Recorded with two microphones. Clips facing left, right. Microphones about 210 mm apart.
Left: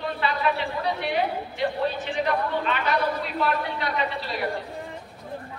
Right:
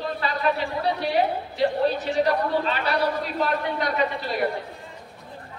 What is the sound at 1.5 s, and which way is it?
A man's voice, 35° right (ahead or behind).